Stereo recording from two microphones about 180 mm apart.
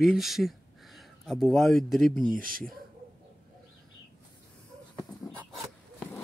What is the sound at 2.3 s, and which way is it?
Speech, 50° right (ahead or behind).